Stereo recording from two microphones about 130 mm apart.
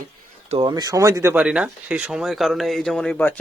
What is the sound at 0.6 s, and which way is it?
Speech, 30° right (ahead or behind).